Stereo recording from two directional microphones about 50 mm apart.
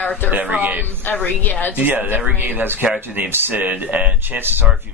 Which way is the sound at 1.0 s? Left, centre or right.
Left.